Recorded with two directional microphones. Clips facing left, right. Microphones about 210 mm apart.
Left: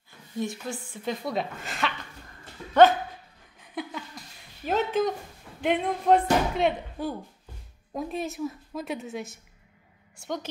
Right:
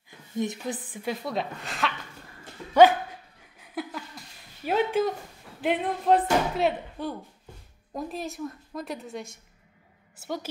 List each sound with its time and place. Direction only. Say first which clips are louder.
0.4 s a woman's voice: right 2 dB; 20° right (ahead or behind)
1.1 s speech: left 2 dB; centre (ahead or behind)
3.5 s a sound: right 1 dB; 5° right (ahead or behind)
4.6 s a woman's voice: right 1 dB; 10° right (ahead or behind)